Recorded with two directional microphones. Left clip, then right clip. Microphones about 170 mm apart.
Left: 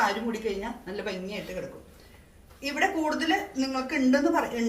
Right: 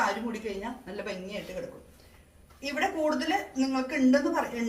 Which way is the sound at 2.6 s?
25° left (ahead or behind).